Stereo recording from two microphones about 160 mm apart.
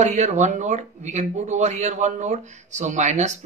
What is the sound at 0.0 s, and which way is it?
Speech, 45° right (ahead or behind).